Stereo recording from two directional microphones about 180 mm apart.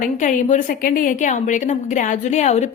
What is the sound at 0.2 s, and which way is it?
Speech, 45° left (ahead or behind).